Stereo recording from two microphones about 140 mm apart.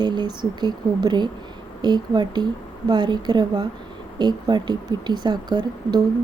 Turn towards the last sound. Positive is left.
turn(degrees=-30)  # may be behind; listen again after turning